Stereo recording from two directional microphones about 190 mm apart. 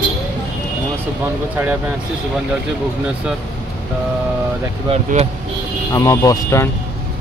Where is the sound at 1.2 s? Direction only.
10° right (ahead or behind).